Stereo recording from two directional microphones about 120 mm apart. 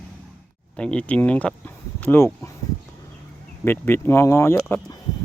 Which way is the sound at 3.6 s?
20° left (ahead or behind).